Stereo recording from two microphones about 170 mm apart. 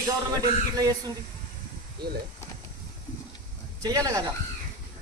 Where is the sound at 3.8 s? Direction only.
20° right (ahead or behind).